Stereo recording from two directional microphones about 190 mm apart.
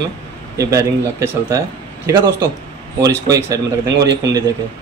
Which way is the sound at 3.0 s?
15° right (ahead or behind).